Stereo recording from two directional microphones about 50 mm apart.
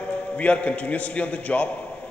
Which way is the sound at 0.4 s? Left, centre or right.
Left.